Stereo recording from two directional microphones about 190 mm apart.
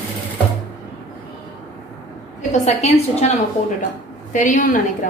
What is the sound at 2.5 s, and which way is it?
A woman's voice, 35° left (ahead or behind).